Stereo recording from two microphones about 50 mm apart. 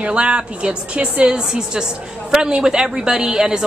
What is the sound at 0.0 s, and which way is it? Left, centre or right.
A woman's voice, right.